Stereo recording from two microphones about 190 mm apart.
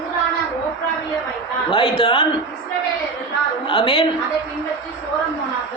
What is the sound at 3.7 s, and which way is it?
Speech, 25° left (ahead or behind).